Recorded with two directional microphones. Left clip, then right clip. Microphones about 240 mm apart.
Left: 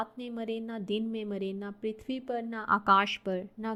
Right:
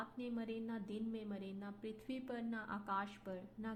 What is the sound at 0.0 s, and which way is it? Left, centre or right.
A woman's voice, left.